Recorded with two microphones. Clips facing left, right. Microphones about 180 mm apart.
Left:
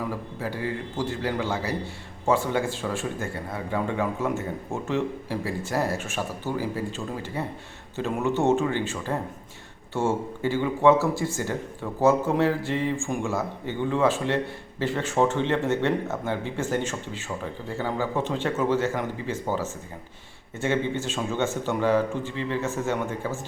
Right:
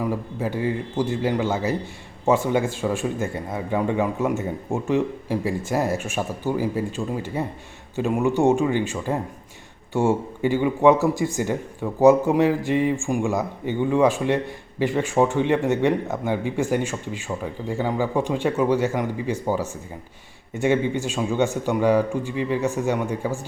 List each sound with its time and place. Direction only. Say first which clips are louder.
0.0 s a man's voice: right 5 dB; 15° right (ahead or behind)